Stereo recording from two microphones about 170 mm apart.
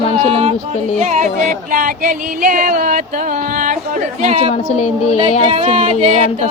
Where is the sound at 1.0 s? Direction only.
45° right (ahead or behind).